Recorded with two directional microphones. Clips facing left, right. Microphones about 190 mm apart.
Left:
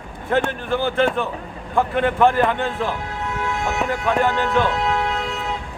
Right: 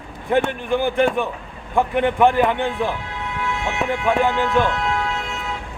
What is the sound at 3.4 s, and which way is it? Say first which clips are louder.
Music: even; 40° left (ahead or behind).